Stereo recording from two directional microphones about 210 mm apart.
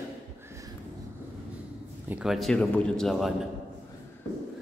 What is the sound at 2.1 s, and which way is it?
A man's voice, 5° right (ahead or behind).